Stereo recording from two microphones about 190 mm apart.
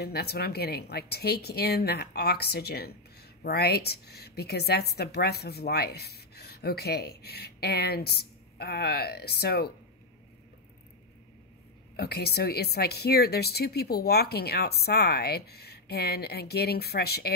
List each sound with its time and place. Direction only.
0.0 s speech: 55° left (ahead or behind)
12.0 s speech: 55° left (ahead or behind)